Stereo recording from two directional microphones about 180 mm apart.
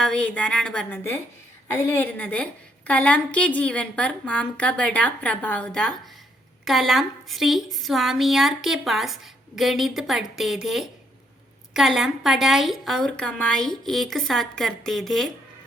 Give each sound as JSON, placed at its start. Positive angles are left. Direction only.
{"t": 0.0, "sound": "a woman's voice", "side_deg": 5}